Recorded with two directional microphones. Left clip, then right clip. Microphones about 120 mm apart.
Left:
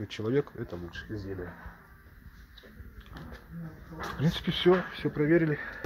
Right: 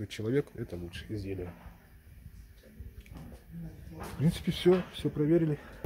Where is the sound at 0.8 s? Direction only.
50° right (ahead or behind).